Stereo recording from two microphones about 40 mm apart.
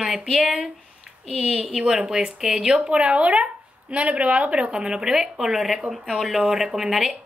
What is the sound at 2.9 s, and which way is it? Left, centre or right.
A woman's voice, right.